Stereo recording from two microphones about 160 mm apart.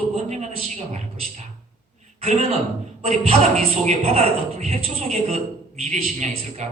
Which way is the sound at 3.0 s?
40° right (ahead or behind).